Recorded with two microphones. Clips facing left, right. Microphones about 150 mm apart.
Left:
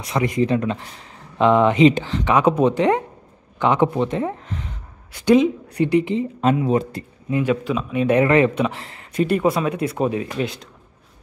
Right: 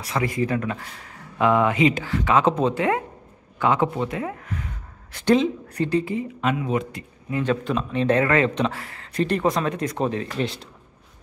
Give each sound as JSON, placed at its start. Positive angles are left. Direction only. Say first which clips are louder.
{"t": 0.0, "sound": "speech", "louder": "left 4 dB", "side_deg": 20}
{"t": 5.3, "sound": "speech", "louder": "left 4 dB", "side_deg": 15}
{"t": 6.4, "sound": "a man's voice", "louder": "left 6 dB", "side_deg": 30}
{"t": 7.6, "sound": "speech", "louder": "left 2 dB", "side_deg": 5}
{"t": 10.4, "sound": "speech", "louder": "left 1 dB", "side_deg": 0}